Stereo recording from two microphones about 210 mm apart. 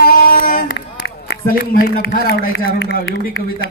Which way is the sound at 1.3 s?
50° left (ahead or behind).